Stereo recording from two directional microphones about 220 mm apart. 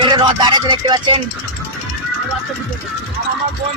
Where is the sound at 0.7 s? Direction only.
20° right (ahead or behind).